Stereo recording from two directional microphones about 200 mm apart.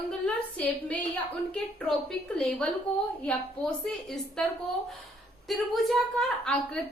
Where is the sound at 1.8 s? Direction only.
5° left (ahead or behind).